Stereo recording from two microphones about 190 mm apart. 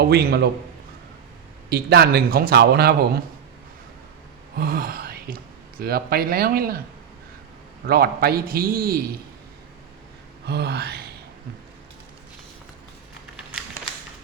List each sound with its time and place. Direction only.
0.0 s speech: 55° right (ahead or behind)
1.7 s speech: 55° right (ahead or behind)
4.5 s a man's voice: 50° right (ahead or behind)
7.9 s a man's voice: 55° right (ahead or behind)
10.4 s gasp: 60° right (ahead or behind)
13.3 s crumpling: 5° right (ahead or behind)